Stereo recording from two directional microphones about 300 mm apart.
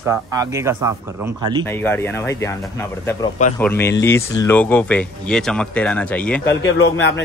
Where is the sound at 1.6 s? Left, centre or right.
Centre.